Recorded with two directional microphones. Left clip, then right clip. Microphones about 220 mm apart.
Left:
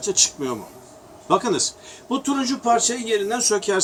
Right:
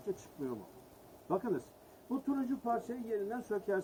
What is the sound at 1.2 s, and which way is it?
A man's voice, 20° left (ahead or behind).